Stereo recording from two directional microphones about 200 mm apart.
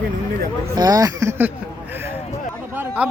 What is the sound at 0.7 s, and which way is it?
Speech, 20° right (ahead or behind).